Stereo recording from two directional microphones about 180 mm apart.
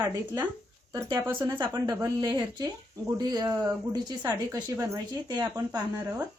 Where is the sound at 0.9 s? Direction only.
20° right (ahead or behind).